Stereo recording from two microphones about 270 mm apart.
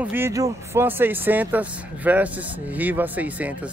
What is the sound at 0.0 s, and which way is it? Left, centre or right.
Speech, centre.